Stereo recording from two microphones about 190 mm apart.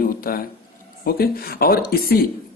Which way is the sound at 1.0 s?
50° left (ahead or behind).